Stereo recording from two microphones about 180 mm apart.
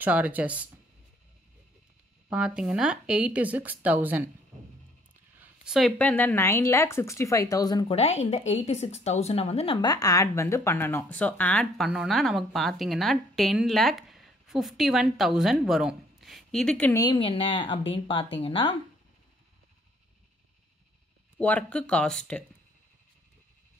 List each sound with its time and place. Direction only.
0.0 s a woman's voice: 10° right (ahead or behind)
2.2 s a woman's voice: 5° right (ahead or behind)
5.3 s a sound: 10° right (ahead or behind)
5.8 s a woman's voice: 5° left (ahead or behind); by 7.8 s 20° left (ahead or behind)
7.9 s speech: 35° left (ahead or behind); by 16.9 s 5° left (ahead or behind)
16.9 s speech: 20° left (ahead or behind)
21.4 s speech: 5° left (ahead or behind)